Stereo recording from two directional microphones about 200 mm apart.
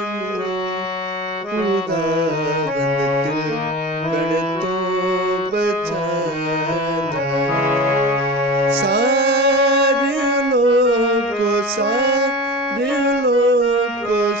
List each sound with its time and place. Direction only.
8.8 s music: 55° right (ahead or behind)
13.0 s singing: 60° right (ahead or behind)